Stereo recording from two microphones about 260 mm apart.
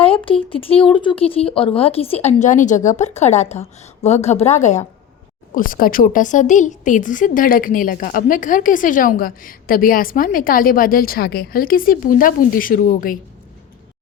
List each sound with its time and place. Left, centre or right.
0.3 s a woman's voice: left